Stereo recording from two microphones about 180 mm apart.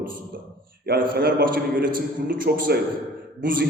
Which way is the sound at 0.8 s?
60° right (ahead or behind).